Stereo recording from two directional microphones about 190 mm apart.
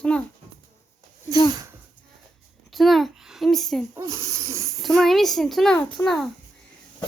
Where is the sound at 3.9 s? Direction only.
15° right (ahead or behind).